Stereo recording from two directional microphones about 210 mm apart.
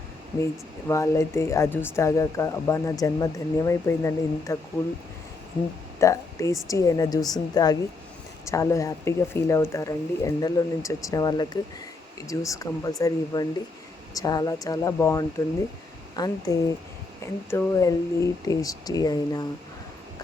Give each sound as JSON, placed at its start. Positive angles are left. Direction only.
{"t": 0.9, "sound": "speech", "side_deg": 15}
{"t": 6.0, "sound": "speech", "side_deg": 15}